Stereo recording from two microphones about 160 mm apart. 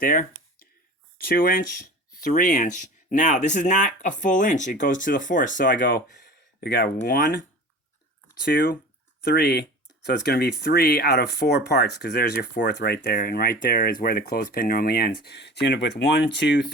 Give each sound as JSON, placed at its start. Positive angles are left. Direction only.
{"t": 0.0, "sound": "a sound", "side_deg": 60}
{"t": 1.2, "sound": "speech", "side_deg": 65}
{"t": 6.6, "sound": "speech", "side_deg": 80}
{"t": 8.4, "sound": "speech", "side_deg": 90}